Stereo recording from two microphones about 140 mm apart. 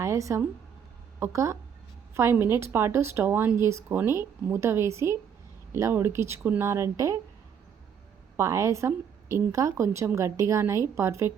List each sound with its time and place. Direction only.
0.0 s a woman's voice: 20° right (ahead or behind)
8.4 s a woman's voice: 20° right (ahead or behind)